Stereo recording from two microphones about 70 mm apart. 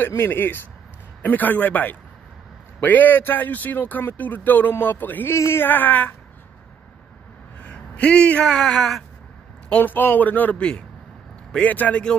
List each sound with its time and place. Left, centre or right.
0.0 s speech: left
5.3 s speech: left
7.6 s speech: centre
9.7 s speech: left